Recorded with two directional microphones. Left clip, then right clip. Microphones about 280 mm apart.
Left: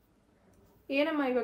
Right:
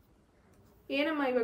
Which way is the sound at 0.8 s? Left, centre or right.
Centre.